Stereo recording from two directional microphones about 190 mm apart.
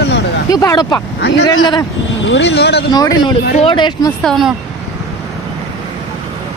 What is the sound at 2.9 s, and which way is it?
Speech, 20° left (ahead or behind).